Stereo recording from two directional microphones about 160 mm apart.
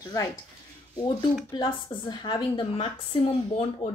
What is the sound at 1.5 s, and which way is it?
A woman's voice, 30° left (ahead or behind).